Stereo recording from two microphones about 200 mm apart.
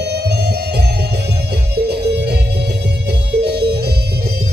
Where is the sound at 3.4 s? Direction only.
55° right (ahead or behind).